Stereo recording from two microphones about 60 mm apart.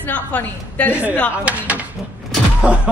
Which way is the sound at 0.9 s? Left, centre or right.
Right.